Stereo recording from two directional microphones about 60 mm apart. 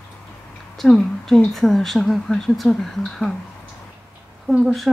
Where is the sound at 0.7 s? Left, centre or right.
Centre.